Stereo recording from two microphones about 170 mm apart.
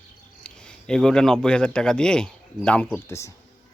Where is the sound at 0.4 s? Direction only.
5° left (ahead or behind).